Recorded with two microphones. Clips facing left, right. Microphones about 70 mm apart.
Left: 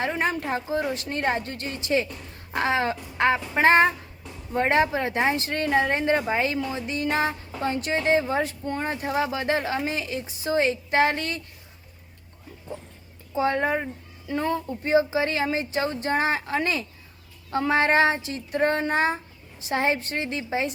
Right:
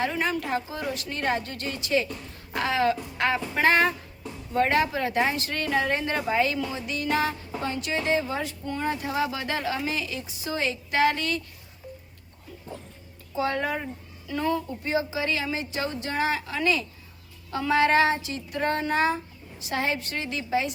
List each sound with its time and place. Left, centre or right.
0.0 s a woman's voice: left
2.5 s a sound: left
4.5 s a woman's voice: left
13.3 s a woman's voice: left